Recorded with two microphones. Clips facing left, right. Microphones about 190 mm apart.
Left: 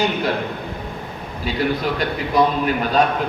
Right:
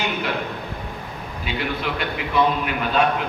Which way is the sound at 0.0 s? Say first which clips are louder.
Left 5 dB; 35° left (ahead or behind).